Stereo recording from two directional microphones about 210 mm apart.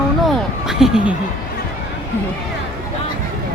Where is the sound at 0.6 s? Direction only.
Centre (ahead or behind).